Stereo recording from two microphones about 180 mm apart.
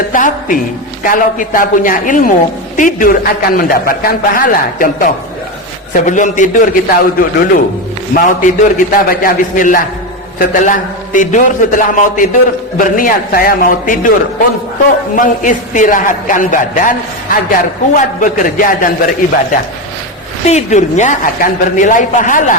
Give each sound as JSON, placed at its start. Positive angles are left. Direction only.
{"t": 0.1, "sound": "a sound", "side_deg": 45}
{"t": 1.0, "sound": "a man's voice", "side_deg": 50}
{"t": 15.1, "sound": "a man's voice", "side_deg": 45}